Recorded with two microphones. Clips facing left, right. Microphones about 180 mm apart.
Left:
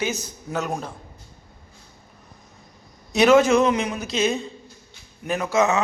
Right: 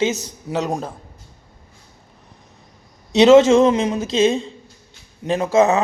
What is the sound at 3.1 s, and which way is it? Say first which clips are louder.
A man's voice: right 5 dB; 25° right (ahead or behind).